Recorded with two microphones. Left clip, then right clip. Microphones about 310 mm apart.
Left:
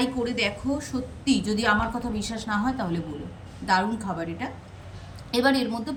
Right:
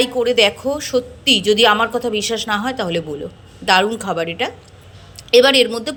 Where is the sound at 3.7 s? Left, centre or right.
Centre.